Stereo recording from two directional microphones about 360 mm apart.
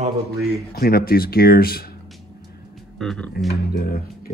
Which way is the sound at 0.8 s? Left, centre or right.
Left.